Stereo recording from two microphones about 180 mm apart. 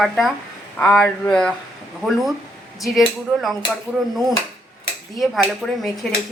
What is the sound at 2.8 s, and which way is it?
Speech, centre (ahead or behind).